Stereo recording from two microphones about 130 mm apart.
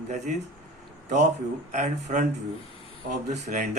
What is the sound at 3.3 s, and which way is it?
Speech, 70° right (ahead or behind).